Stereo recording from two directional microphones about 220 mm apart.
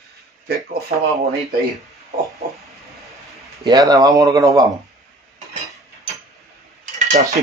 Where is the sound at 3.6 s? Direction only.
15° right (ahead or behind).